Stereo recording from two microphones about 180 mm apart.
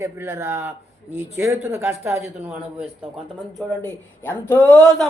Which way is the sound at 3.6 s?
5° left (ahead or behind).